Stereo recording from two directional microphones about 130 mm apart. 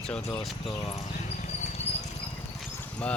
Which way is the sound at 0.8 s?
70° left (ahead or behind).